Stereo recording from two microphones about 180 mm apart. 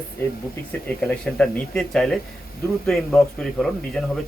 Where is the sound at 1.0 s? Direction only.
5° left (ahead or behind).